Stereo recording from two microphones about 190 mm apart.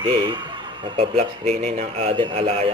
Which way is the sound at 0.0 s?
25° right (ahead or behind).